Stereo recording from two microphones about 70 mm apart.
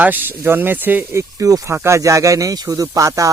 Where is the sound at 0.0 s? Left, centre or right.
Right.